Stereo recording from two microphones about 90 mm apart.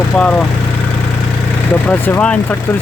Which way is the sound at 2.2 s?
10° left (ahead or behind).